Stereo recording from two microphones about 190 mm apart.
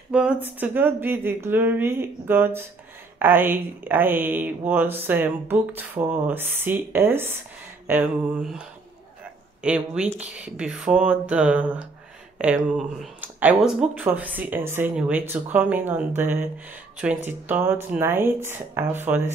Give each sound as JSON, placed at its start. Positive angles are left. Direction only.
{"t": 0.1, "sound": "speech", "side_deg": -5}